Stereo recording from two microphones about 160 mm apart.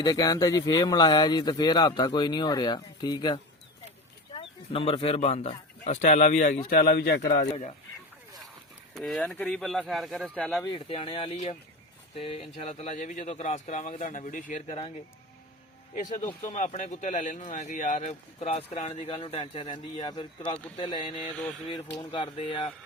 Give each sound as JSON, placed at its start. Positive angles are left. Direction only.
{"t": 0.0, "sound": "speech", "side_deg": 25}
{"t": 4.4, "sound": "speech", "side_deg": 35}
{"t": 9.0, "sound": "speech", "side_deg": 5}
{"t": 10.6, "sound": "speech", "side_deg": 30}
{"t": 16.6, "sound": "speech", "side_deg": 50}
{"t": 18.0, "sound": "speech", "side_deg": 40}